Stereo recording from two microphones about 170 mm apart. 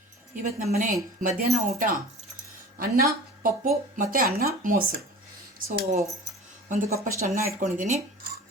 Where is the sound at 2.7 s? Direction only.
55° right (ahead or behind).